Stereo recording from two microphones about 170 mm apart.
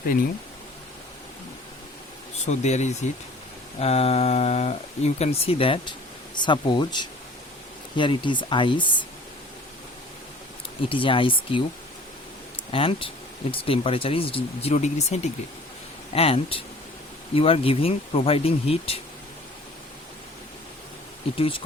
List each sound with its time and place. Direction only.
2.4 s speech: 40° left (ahead or behind)
10.8 s speech: 30° left (ahead or behind)
12.7 s speech: 30° left (ahead or behind)
21.3 s speech: 35° left (ahead or behind)